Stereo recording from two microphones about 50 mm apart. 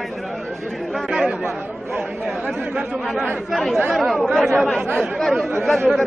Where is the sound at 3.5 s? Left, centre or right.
Centre.